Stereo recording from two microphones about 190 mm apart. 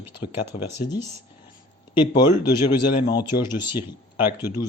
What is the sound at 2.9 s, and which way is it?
Speech, 55° left (ahead or behind).